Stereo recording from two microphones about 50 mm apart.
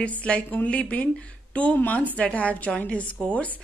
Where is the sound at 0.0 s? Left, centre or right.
Left.